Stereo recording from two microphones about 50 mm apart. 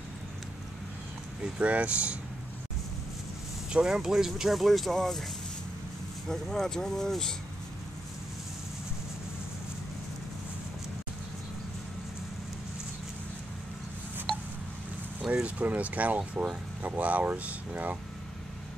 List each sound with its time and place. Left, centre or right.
1.4 s speech: right
3.7 s speech: centre
6.2 s speech: centre
15.4 s speech: right